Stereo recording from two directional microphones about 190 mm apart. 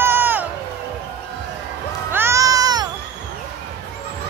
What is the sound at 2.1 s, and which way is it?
Music, 10° right (ahead or behind).